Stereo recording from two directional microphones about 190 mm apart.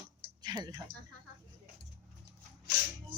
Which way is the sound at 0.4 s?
20° right (ahead or behind).